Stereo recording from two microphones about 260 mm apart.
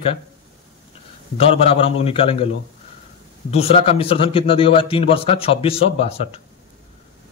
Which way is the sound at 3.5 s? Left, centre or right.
Left.